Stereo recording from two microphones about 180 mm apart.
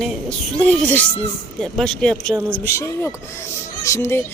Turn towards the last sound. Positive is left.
turn(degrees=15)  # may be behind; listen again after turning